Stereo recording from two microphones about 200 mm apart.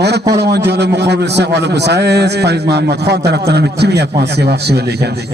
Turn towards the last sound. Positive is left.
turn(degrees=-55)  # may be behind; listen again after turning